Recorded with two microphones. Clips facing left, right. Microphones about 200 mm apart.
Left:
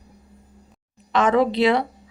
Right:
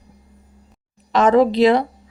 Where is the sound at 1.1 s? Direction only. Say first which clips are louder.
Right 4 dB; 40° right (ahead or behind).